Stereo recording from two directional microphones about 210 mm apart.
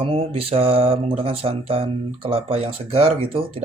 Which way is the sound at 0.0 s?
25° right (ahead or behind).